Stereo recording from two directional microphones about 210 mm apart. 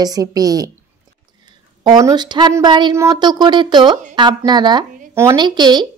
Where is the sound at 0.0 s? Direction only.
15° right (ahead or behind).